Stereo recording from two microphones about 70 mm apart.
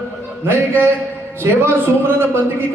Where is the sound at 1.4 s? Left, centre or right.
Right.